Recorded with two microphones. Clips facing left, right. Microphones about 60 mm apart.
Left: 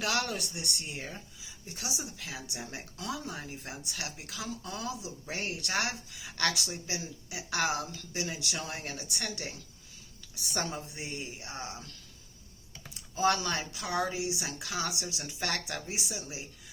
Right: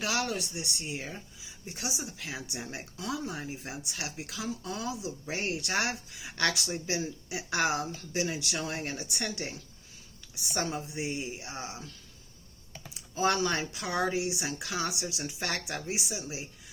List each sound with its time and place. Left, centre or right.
0.0 s speech: centre
1.6 s speech: right
2.6 s speech: centre
10.5 s speech: centre
12.9 s speech: right